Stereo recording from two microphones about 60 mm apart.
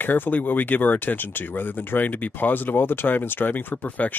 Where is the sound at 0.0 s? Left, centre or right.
Left.